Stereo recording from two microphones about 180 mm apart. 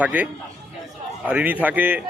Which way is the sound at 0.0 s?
10° right (ahead or behind).